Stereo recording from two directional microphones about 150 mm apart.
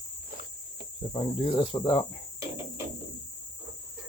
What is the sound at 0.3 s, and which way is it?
Cricket, 75° right (ahead or behind).